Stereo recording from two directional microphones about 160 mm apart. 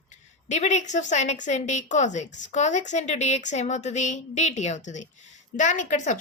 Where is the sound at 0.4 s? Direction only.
45° left (ahead or behind).